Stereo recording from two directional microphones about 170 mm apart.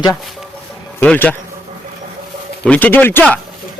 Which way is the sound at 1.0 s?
10° left (ahead or behind).